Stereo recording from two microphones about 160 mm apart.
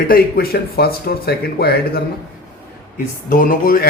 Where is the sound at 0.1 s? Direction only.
70° left (ahead or behind).